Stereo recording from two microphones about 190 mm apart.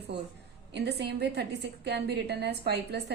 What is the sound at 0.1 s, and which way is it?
A woman's voice, 60° right (ahead or behind).